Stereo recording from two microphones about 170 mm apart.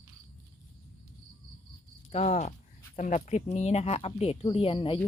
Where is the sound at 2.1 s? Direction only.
40° left (ahead or behind).